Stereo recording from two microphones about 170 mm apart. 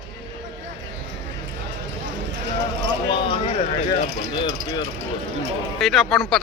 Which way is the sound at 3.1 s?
35° left (ahead or behind).